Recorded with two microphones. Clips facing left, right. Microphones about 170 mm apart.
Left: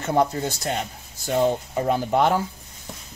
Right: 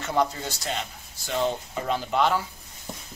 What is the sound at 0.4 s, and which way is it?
Speech, 50° left (ahead or behind).